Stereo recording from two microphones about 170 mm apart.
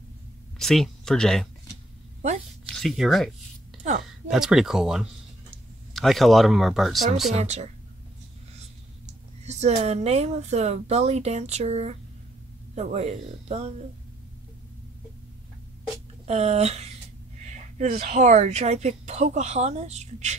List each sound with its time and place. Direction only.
0.6 s speech: centre (ahead or behind)
2.6 s speech: 5° left (ahead or behind)
3.8 s a woman's voice: 40° right (ahead or behind)
4.3 s speech: 5° right (ahead or behind)
7.3 s speech: 40° right (ahead or behind)
9.0 s speech: 40° right (ahead or behind)
16.3 s speech: 40° right (ahead or behind)
18.0 s speech: 40° right (ahead or behind)